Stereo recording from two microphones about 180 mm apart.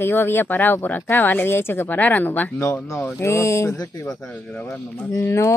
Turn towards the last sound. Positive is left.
turn(degrees=15)  # may be behind; listen again after turning